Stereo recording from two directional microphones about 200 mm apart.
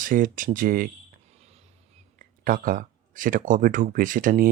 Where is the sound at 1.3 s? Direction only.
30° right (ahead or behind).